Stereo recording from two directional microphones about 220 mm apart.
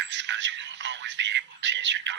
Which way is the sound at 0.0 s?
55° right (ahead or behind).